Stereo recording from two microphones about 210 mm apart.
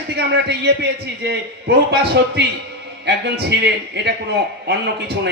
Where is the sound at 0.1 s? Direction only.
55° right (ahead or behind).